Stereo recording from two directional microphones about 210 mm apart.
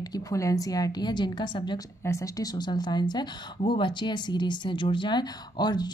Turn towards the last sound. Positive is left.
turn(degrees=20)  # may be behind; listen again after turning